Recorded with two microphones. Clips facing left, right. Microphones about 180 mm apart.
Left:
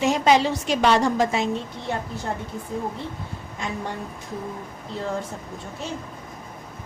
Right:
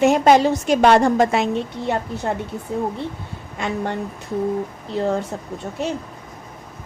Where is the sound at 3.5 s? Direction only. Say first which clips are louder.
Right 6 dB; 70° right (ahead or behind).